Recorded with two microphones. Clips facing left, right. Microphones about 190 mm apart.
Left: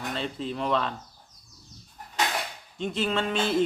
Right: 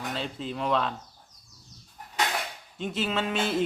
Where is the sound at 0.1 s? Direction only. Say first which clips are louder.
Left 3 dB; centre (ahead or behind).